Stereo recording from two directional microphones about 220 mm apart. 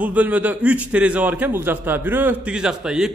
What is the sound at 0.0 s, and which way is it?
A man's voice, 5° right (ahead or behind).